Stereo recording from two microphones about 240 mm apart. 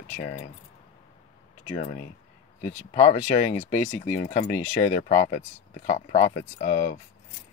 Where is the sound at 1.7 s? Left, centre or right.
Left.